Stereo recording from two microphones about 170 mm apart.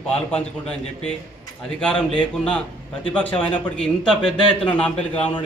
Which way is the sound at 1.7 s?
5° left (ahead or behind).